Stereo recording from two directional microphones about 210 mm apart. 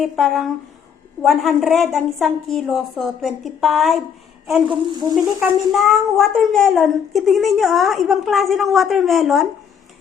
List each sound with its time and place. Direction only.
0.0 s speech: centre (ahead or behind)
4.7 s speech: 20° right (ahead or behind)
5.7 s speech: centre (ahead or behind)